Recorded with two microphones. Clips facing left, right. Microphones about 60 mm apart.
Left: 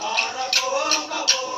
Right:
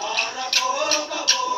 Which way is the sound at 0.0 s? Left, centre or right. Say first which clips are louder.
Left 1 dB; left.